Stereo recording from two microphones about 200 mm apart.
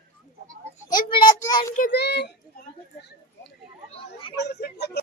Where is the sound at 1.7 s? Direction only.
50° left (ahead or behind).